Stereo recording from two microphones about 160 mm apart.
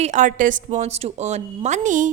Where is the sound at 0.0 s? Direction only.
50° right (ahead or behind).